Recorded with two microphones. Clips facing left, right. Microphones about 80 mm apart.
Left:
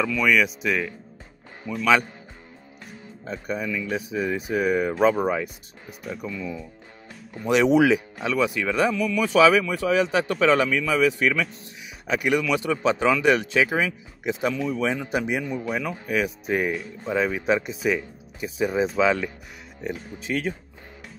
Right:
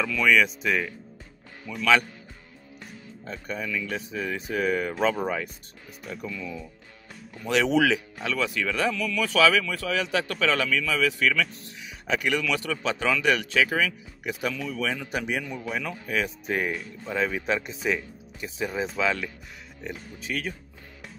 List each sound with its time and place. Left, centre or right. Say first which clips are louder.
0.0 s speech: left 1 dB; centre
1.6 s speech: left 6 dB; centre
3.3 s a man's voice: left 4 dB; centre
15.6 s speech: left 4 dB; centre
15.9 s speech: left 3 dB; centre